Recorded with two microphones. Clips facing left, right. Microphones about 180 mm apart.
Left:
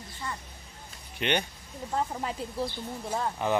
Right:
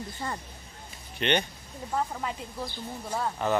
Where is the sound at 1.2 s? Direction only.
10° left (ahead or behind).